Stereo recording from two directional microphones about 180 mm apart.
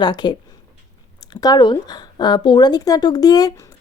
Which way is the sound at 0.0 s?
25° left (ahead or behind).